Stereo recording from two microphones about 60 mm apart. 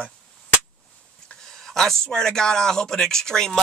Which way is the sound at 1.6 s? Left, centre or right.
Centre.